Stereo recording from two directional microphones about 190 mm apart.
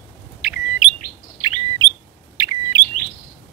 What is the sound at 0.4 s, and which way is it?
Chirp, 5° right (ahead or behind).